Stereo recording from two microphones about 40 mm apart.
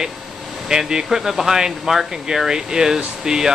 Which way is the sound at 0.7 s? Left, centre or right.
Centre.